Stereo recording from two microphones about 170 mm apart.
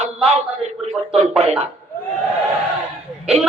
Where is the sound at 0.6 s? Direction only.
40° right (ahead or behind).